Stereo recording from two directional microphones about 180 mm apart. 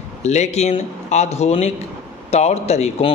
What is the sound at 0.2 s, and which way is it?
Speech, 40° left (ahead or behind).